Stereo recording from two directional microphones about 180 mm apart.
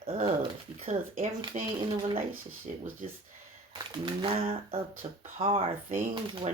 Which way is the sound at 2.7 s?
40° right (ahead or behind).